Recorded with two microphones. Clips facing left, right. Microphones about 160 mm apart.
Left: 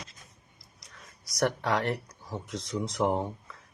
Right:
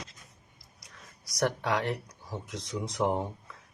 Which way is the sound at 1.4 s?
15° right (ahead or behind).